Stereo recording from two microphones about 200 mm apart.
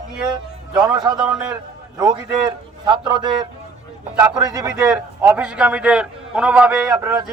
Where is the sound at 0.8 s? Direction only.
20° right (ahead or behind).